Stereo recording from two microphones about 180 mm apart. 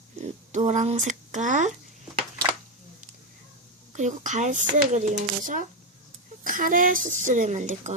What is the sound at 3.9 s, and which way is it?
A woman's voice, 40° right (ahead or behind).